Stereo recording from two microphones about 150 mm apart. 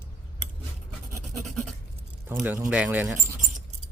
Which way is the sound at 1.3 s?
Centre (ahead or behind).